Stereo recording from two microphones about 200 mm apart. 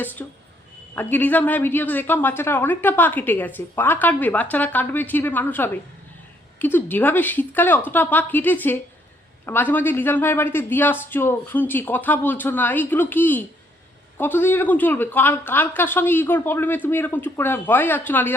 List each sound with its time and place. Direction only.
0.2 s a woman's voice: 10° left (ahead or behind)